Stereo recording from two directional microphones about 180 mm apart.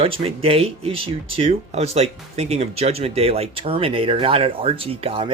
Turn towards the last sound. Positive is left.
turn(degrees=-30)  # may be behind; listen again after turning